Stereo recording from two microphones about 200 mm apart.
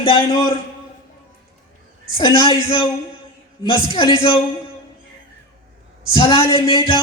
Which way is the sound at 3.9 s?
25° left (ahead or behind).